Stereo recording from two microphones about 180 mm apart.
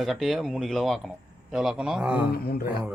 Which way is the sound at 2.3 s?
60° left (ahead or behind).